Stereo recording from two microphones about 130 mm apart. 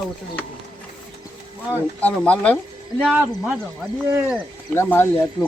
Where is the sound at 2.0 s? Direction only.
10° left (ahead or behind).